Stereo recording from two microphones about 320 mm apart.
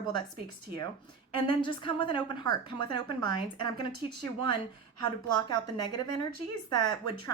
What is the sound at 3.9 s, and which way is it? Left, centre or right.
Speech, right.